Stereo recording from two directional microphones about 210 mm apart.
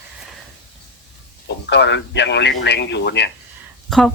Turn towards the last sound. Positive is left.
turn(degrees=0)  # may be behind; listen again after turning